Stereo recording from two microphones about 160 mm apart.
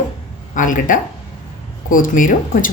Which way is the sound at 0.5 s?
55° left (ahead or behind).